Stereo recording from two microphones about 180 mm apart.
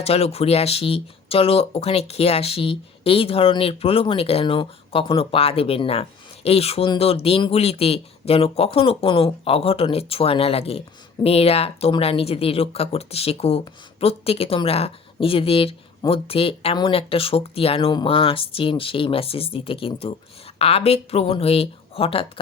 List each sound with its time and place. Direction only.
0.0 s speech: 35° left (ahead or behind)